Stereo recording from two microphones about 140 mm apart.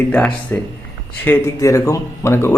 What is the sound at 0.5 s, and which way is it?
Speech, 15° left (ahead or behind).